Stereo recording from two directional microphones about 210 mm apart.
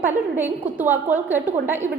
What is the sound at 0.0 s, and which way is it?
A woman's voice, 10° right (ahead or behind).